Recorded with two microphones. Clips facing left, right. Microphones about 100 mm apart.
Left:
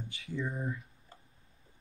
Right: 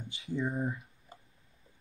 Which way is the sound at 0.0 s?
20° right (ahead or behind).